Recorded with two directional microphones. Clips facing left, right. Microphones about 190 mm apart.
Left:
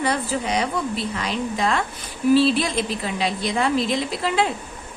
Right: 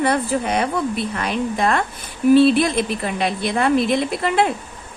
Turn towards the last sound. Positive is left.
turn(degrees=-55)  # may be behind; listen again after turning